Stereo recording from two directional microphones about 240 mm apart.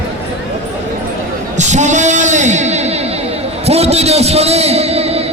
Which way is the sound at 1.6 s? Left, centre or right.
Right.